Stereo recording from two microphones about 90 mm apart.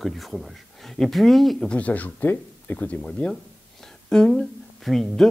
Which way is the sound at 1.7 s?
15° left (ahead or behind).